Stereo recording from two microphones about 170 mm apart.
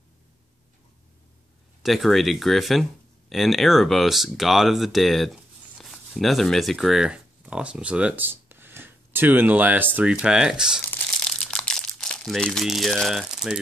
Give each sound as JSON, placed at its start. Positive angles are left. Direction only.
{"t": 1.8, "sound": "speech", "side_deg": 0}
{"t": 10.8, "sound": "crumpling", "side_deg": 5}